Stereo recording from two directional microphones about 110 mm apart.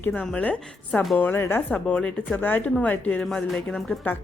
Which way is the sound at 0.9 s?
10° left (ahead or behind).